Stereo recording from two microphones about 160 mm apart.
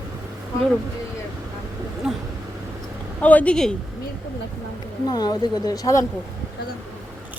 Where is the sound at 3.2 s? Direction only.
10° left (ahead or behind).